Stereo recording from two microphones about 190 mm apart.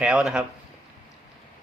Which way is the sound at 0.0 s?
5° right (ahead or behind).